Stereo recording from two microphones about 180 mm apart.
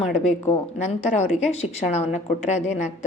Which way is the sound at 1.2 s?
40° left (ahead or behind).